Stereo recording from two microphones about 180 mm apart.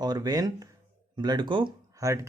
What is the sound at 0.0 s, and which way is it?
Speech, 20° right (ahead or behind).